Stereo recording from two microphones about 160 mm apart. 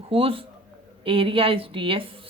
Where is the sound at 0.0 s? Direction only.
35° right (ahead or behind).